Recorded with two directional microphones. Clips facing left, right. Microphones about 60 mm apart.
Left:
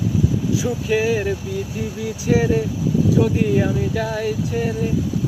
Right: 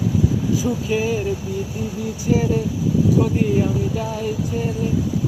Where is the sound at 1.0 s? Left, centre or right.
Left.